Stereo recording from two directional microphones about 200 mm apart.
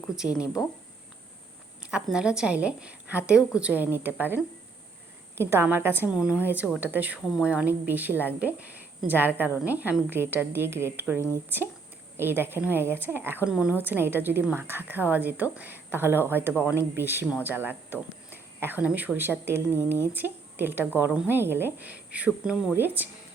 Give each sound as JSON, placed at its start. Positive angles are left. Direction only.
{"t": 0.2, "sound": "speech", "side_deg": -5}
{"t": 0.4, "sound": "speech", "side_deg": 15}
{"t": 2.0, "sound": "a woman's voice", "side_deg": -5}
{"t": 5.4, "sound": "a woman's voice", "side_deg": -10}